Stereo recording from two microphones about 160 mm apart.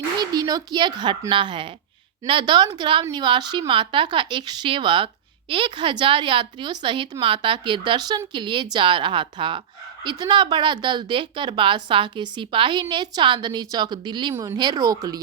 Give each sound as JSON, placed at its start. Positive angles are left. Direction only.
{"t": 0.2, "sound": "a woman's voice", "side_deg": -25}